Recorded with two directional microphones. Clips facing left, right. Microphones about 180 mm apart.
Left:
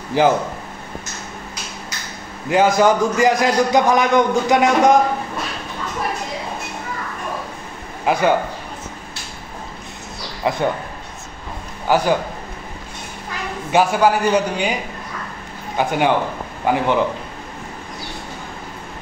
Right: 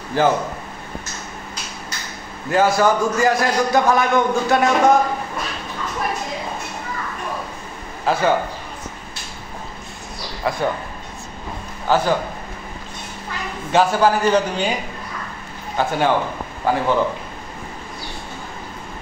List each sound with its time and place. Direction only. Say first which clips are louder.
0.1 s a man's voice: left 2 dB; 15° left (ahead or behind)
2.5 s a man's voice: left 2 dB; 15° left (ahead or behind)
8.0 s a man's voice: left 1 dB; 15° left (ahead or behind)
10.4 s a man's voice: left 2 dB; 20° left (ahead or behind)
11.9 s a man's voice: left 1 dB; 15° left (ahead or behind)
13.7 s a man's voice: left 1 dB; 15° left (ahead or behind)
15.8 s a man's voice: left 1 dB; 15° left (ahead or behind)